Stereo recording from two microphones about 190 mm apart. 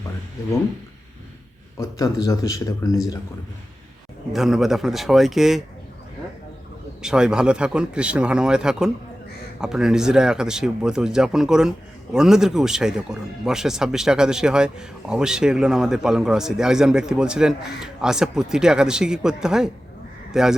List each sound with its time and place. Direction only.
1.8 s speech: 20° left (ahead or behind)
4.3 s speech: centre (ahead or behind)
7.0 s a man's voice: 5° right (ahead or behind)